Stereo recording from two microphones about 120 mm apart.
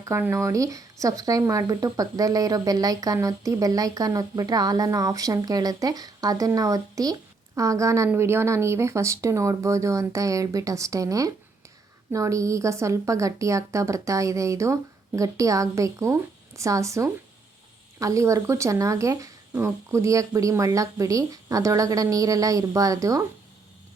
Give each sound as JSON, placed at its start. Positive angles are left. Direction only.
{"t": 0.0, "sound": "speech", "side_deg": -20}